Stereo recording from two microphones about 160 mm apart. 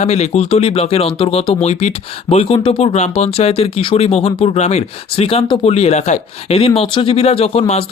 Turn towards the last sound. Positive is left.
turn(degrees=40)  # may be behind; listen again after turning